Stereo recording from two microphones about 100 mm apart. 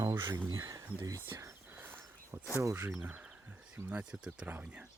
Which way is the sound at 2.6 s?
25° right (ahead or behind).